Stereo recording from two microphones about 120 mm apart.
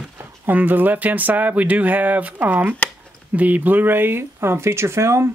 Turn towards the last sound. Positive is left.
turn(degrees=-25)  # may be behind; listen again after turning